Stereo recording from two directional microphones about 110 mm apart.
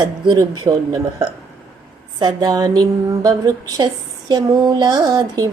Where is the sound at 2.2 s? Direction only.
35° right (ahead or behind).